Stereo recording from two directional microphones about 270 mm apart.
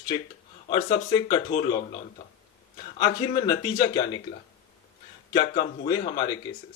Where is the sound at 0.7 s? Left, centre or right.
Centre.